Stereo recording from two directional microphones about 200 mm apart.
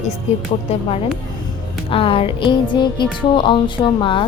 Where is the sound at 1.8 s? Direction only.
25° left (ahead or behind).